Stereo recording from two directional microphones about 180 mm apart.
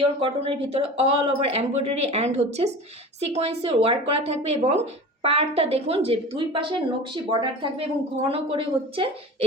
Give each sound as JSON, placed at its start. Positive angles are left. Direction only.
{"t": 0.2, "sound": "a woman's voice", "side_deg": -30}